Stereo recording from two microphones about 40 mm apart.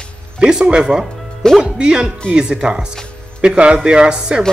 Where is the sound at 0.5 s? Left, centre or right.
Right.